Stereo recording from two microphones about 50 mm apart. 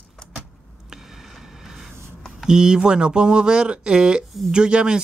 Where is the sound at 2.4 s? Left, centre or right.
Centre.